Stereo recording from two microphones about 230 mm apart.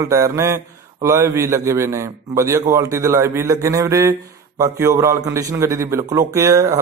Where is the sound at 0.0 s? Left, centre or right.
Centre.